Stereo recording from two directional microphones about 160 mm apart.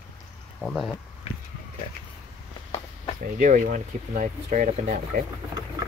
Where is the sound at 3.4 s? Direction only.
55° right (ahead or behind).